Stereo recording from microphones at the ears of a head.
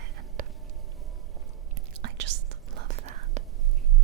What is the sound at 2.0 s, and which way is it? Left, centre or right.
Whispering, right.